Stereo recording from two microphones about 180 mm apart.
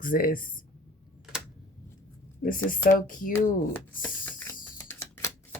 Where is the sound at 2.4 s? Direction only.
50° left (ahead or behind).